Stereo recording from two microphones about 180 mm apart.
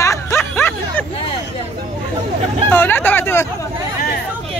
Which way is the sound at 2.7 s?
10° left (ahead or behind).